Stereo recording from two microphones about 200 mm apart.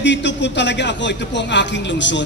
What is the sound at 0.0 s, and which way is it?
A man's voice, 65° left (ahead or behind).